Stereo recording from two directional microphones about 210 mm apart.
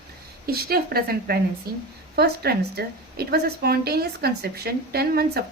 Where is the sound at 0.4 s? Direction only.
45° right (ahead or behind).